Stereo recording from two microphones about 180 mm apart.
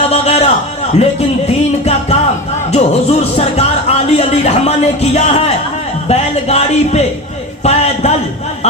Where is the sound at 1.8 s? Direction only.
35° left (ahead or behind).